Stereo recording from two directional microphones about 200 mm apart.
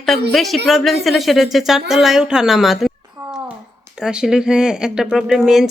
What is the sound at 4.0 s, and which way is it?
Speech, 5° right (ahead or behind).